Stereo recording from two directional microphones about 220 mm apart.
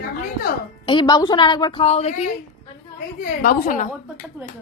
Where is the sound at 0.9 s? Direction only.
20° left (ahead or behind).